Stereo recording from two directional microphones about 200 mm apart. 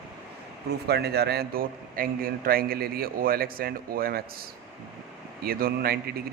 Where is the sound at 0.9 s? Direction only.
55° right (ahead or behind).